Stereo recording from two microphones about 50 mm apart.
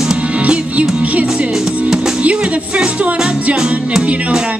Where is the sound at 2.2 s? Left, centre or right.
Right.